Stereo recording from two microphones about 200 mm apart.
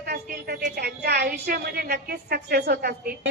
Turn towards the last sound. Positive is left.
turn(degrees=-50)  # may be behind; listen again after turning